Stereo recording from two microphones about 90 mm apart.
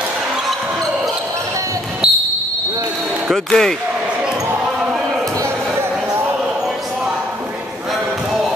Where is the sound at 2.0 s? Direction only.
5° right (ahead or behind).